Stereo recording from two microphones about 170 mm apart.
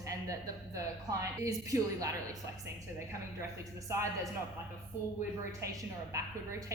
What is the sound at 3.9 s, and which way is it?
Speech, 15° right (ahead or behind).